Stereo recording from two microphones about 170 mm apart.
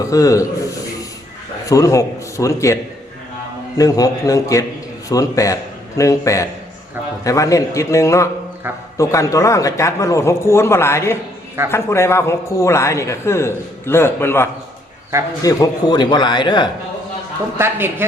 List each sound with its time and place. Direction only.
0.0 s a man's voice: 20° left (ahead or behind)
1.6 s a man's voice: 20° left (ahead or behind)
3.8 s a man's voice: 20° left (ahead or behind)
15.4 s a man's voice: 25° left (ahead or behind)
17.6 s speech: 15° right (ahead or behind)